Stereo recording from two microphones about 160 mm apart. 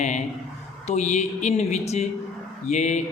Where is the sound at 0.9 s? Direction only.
45° left (ahead or behind).